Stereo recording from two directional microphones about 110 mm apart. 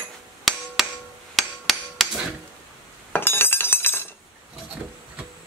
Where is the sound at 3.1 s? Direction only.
20° left (ahead or behind).